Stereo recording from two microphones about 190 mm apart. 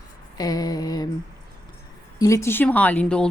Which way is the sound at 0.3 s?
20° left (ahead or behind).